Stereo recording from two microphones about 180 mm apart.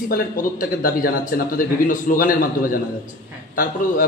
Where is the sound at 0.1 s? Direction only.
55° left (ahead or behind).